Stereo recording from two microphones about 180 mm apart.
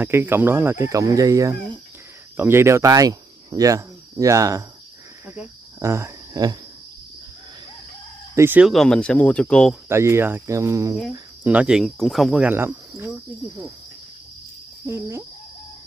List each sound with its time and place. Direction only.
0.0 s speech: 10° right (ahead or behind)
8.4 s speech: 10° right (ahead or behind)
9.8 s speech: 15° right (ahead or behind)
11.0 s speech: 5° right (ahead or behind)
14.9 s speech: 15° right (ahead or behind)